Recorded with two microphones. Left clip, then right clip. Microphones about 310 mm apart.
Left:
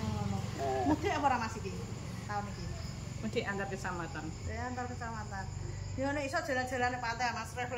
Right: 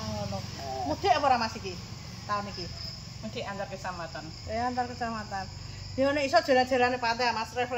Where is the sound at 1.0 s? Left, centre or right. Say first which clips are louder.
Right 7 dB; centre.